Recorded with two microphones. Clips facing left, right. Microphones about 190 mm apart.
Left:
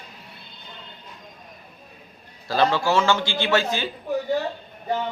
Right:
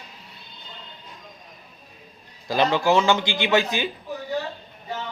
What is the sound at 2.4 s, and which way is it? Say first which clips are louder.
A man's voice: right 1 dB; 15° right (ahead or behind).